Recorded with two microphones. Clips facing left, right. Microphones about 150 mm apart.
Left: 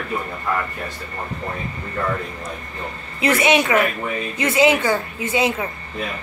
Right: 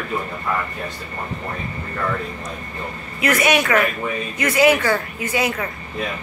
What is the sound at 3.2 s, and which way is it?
A woman's voice, 25° left (ahead or behind).